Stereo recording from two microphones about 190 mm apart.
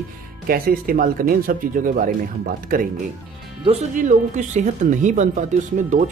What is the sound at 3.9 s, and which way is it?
Speech, 40° right (ahead or behind).